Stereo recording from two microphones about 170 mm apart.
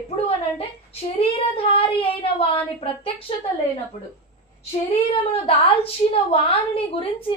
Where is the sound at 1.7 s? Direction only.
35° left (ahead or behind).